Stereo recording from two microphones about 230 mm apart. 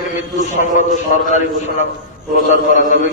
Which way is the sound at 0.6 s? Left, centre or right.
Left.